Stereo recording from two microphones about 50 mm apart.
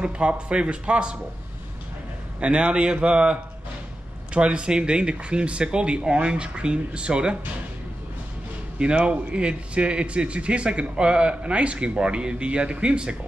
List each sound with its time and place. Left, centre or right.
0.0 s a man's voice: right
2.4 s a man's voice: right
8.7 s a man's voice: centre